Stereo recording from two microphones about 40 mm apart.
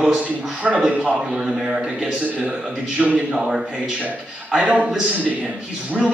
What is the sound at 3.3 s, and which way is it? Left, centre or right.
Speech, centre.